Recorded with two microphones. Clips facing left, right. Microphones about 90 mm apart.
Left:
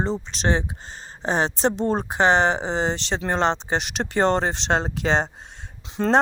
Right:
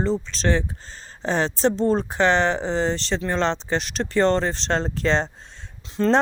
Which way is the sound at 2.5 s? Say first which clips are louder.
Even; 60° left (ahead or behind).